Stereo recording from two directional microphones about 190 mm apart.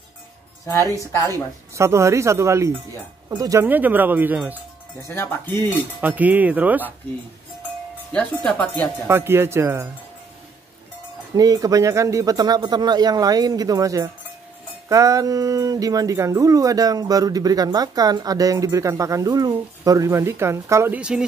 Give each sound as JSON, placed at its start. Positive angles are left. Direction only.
{"t": 0.9, "sound": "speech", "side_deg": 15}
{"t": 1.8, "sound": "speech", "side_deg": -15}
{"t": 5.0, "sound": "speech", "side_deg": 10}
{"t": 5.9, "sound": "speech", "side_deg": -10}
{"t": 8.1, "sound": "speech", "side_deg": 5}
{"t": 9.0, "sound": "speech", "side_deg": -10}
{"t": 11.3, "sound": "speech", "side_deg": -20}